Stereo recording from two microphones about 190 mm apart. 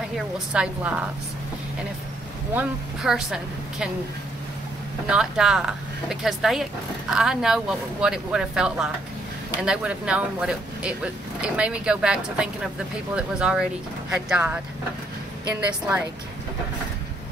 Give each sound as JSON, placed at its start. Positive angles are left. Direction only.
{"t": 0.5, "sound": "a woman's voice", "side_deg": -5}
{"t": 2.5, "sound": "speech", "side_deg": -5}
{"t": 5.1, "sound": "a woman's voice", "side_deg": -5}